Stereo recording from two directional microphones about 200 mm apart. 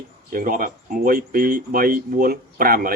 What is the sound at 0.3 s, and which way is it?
Speech, 45° right (ahead or behind).